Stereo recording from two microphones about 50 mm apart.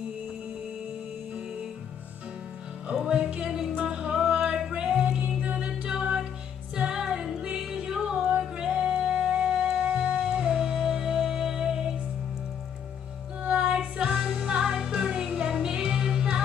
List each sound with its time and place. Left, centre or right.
3.0 s music: centre
13.4 s music: right